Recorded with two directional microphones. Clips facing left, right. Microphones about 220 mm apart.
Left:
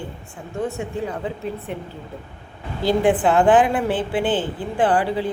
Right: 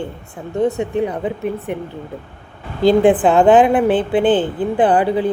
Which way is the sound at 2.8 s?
20° right (ahead or behind).